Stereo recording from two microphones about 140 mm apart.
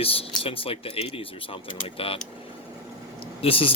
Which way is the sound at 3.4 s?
40° left (ahead or behind).